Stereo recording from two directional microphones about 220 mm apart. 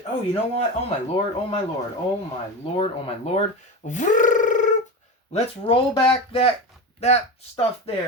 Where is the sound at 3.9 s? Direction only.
35° left (ahead or behind).